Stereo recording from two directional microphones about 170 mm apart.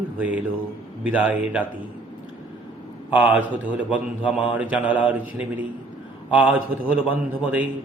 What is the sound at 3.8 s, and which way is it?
Speech, 30° left (ahead or behind).